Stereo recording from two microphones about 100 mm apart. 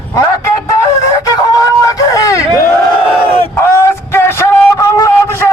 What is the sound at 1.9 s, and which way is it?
Vehicle, 35° left (ahead or behind).